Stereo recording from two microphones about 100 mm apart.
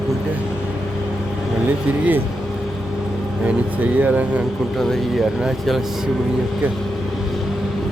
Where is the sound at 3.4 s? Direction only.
15° right (ahead or behind).